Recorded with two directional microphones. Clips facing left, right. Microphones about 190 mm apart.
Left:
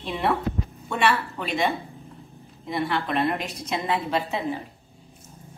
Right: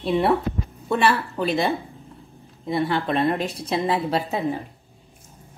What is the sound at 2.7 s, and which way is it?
A woman's voice, 30° right (ahead or behind).